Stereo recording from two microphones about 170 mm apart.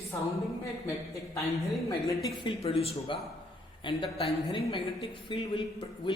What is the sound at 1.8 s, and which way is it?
Speech, 20° left (ahead or behind).